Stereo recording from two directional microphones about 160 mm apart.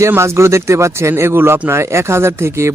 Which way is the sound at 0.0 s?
15° right (ahead or behind).